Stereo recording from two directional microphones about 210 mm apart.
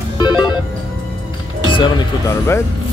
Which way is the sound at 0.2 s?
20° left (ahead or behind).